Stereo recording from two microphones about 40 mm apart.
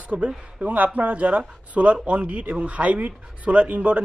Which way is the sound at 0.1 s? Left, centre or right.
Right.